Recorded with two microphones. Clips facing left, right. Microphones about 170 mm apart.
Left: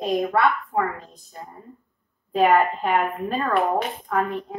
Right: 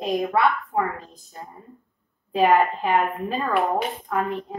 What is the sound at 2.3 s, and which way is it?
A woman's voice, centre (ahead or behind).